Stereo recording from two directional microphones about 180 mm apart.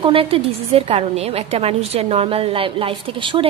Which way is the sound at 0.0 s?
30° right (ahead or behind).